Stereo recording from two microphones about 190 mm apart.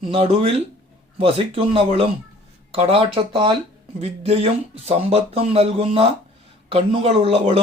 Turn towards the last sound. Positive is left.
turn(degrees=-30)  # may be behind; listen again after turning